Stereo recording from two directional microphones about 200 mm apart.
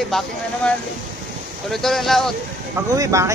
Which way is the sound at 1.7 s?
Centre (ahead or behind).